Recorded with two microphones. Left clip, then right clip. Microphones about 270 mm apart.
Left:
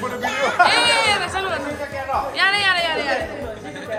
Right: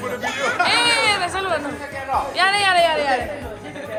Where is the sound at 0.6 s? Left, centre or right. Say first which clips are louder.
Right 1 dB; centre.